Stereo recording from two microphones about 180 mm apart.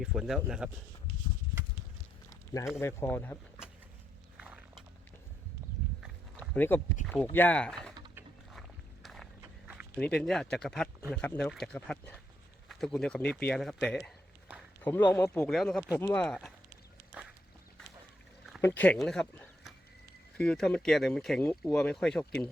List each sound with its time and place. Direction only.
0.0 s speech: centre (ahead or behind)
2.5 s speech: 20° left (ahead or behind)
4.4 s a sound: 5° right (ahead or behind)
6.5 s speech: 10° left (ahead or behind)
9.4 s walk: 10° right (ahead or behind)
9.9 s speech: 5° left (ahead or behind)
18.6 s speech: 10° left (ahead or behind)